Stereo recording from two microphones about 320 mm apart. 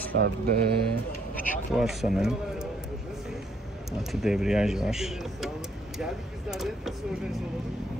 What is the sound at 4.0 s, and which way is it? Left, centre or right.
Speech, centre.